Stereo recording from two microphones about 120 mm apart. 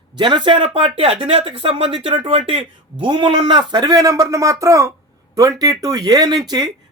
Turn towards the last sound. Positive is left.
turn(degrees=-35)  # may be behind; listen again after turning